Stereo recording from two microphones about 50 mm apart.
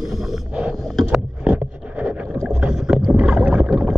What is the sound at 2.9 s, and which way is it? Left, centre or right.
Rowboat, centre.